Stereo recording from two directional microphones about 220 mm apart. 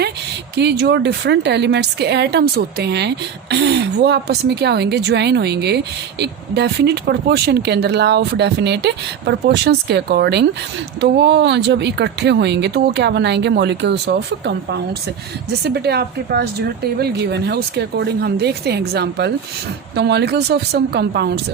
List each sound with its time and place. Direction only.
0.5 s a woman's voice: 50° right (ahead or behind)